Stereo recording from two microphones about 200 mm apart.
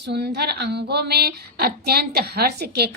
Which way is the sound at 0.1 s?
55° right (ahead or behind).